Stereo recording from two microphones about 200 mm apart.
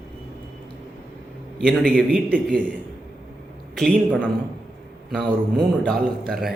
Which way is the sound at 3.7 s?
5° left (ahead or behind).